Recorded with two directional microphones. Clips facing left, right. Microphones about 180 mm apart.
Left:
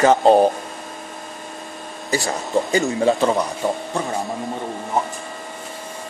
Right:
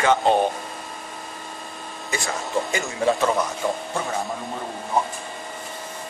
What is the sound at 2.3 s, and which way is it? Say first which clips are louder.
Speech: left 5 dB; 35° left (ahead or behind).